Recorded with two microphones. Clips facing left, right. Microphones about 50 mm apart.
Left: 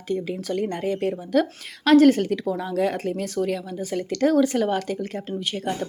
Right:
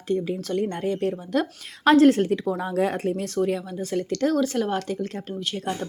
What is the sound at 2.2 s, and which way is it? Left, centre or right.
Speech, centre.